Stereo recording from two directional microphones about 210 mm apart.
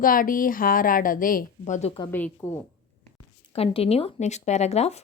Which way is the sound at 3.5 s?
30° left (ahead or behind).